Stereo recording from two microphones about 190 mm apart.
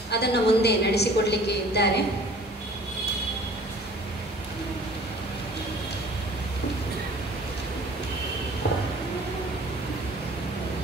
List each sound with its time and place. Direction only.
0.1 s a woman's voice: 60° left (ahead or behind)